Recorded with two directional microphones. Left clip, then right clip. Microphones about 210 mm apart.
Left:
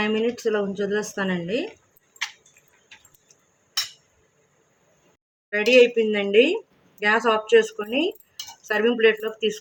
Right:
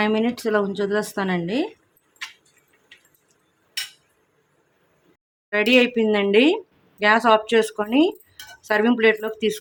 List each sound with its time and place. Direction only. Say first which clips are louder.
0.0 s speech: right 1 dB; 50° right (ahead or behind)
5.5 s speech: left 1 dB; 50° right (ahead or behind)